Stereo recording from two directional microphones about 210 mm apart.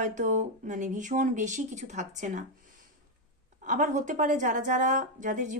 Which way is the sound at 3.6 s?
40° right (ahead or behind).